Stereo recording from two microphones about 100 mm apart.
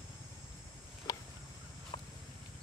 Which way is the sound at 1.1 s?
35° left (ahead or behind).